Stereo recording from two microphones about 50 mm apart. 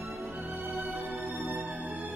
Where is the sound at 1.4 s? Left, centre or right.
Right.